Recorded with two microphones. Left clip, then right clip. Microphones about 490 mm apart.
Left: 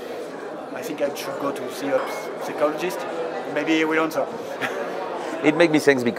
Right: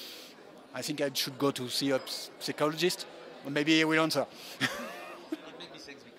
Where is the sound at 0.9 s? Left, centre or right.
Right.